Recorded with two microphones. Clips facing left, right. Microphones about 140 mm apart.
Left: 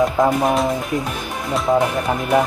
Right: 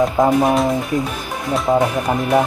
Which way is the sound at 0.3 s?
Centre (ahead or behind).